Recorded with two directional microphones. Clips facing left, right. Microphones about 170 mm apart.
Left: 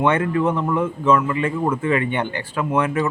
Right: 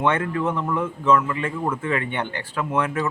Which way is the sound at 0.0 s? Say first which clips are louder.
Left 4 dB; 15° left (ahead or behind).